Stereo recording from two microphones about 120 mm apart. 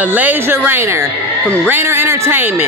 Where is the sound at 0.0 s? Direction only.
15° right (ahead or behind).